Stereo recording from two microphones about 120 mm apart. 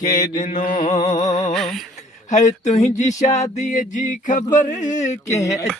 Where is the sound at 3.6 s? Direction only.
90° left.